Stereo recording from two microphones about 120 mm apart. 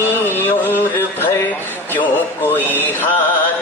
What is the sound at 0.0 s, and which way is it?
Music, 15° left (ahead or behind).